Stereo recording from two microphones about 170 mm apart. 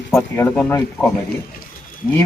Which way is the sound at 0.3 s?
10° left (ahead or behind).